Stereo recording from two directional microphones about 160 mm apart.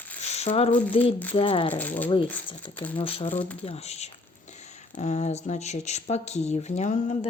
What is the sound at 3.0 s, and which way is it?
Speech, 35° left (ahead or behind).